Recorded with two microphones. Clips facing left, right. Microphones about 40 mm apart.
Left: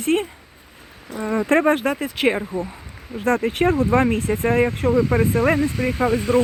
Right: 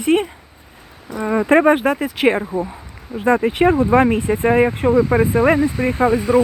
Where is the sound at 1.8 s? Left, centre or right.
Centre.